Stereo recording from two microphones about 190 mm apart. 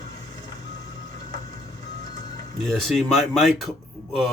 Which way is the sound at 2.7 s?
Centre (ahead or behind).